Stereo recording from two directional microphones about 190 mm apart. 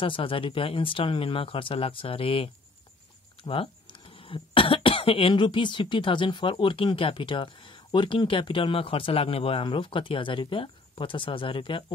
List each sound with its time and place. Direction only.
0.0 s speech: 25° left (ahead or behind)